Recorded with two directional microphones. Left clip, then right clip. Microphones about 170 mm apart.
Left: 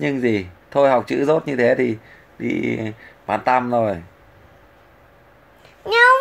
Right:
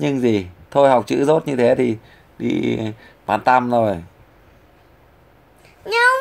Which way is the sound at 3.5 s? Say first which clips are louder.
Right 2 dB; 10° right (ahead or behind).